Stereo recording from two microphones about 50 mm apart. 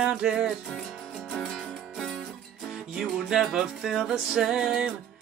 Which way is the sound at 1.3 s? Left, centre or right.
Centre.